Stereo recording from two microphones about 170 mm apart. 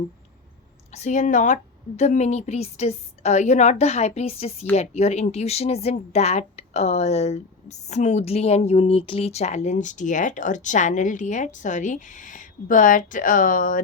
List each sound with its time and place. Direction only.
0.9 s a woman's voice: 40° left (ahead or behind)